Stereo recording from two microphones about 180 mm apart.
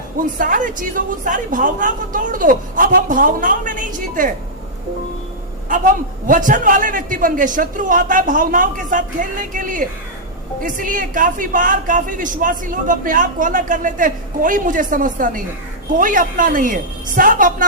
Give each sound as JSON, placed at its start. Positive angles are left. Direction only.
{"t": 0.3, "sound": "a woman's voice", "side_deg": -45}
{"t": 5.6, "sound": "a woman's voice", "side_deg": -45}